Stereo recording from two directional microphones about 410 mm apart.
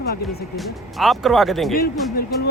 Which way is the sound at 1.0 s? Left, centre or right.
Centre.